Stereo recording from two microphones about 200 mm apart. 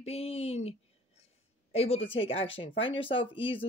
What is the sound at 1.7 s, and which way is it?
A woman's voice, 30° left (ahead or behind).